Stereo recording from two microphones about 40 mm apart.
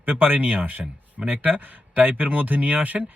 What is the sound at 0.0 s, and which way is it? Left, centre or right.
Speech, right.